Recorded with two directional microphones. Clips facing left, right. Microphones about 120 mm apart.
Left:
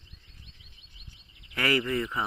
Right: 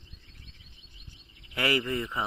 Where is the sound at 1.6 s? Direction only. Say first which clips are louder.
Left 1 dB; 20° right (ahead or behind).